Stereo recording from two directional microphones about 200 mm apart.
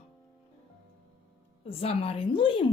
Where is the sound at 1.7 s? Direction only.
30° left (ahead or behind).